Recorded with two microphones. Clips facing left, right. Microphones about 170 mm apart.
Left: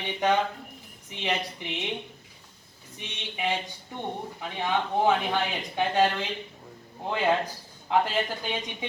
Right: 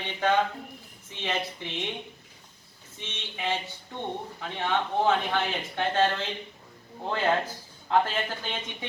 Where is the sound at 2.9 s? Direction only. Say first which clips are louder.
Left 2 dB; 15° left (ahead or behind).